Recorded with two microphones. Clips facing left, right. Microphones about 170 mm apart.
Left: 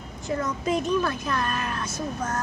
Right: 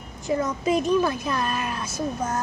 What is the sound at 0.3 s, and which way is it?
Speech, 15° right (ahead or behind).